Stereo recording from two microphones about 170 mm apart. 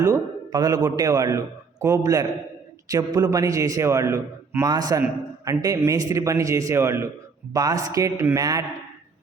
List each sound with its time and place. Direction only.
0.0 s a man's voice: 20° right (ahead or behind)